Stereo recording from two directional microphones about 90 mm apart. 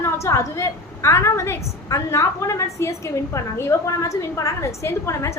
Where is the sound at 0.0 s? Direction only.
35° left (ahead or behind).